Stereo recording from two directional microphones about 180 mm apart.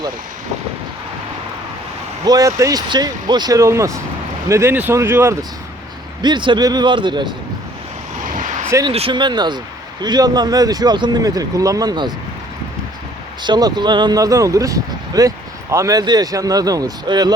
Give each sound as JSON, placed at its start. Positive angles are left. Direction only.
{"t": 2.2, "sound": "speech", "side_deg": -20}
{"t": 6.2, "sound": "speech", "side_deg": -25}
{"t": 8.3, "sound": "vehicle", "side_deg": -45}
{"t": 8.9, "sound": "speech", "side_deg": -30}
{"t": 13.4, "sound": "speech", "side_deg": -25}